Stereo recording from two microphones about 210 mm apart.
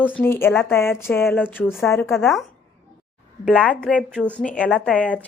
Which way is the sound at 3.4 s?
5° left (ahead or behind).